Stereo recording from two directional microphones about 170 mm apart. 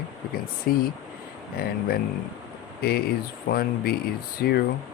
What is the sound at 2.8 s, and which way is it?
Speech, 60° left (ahead or behind).